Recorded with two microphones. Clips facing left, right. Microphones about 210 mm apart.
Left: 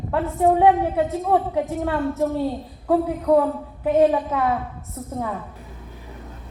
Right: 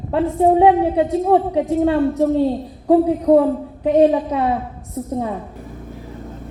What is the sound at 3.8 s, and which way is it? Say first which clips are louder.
Speech: right 3 dB; 25° right (ahead or behind).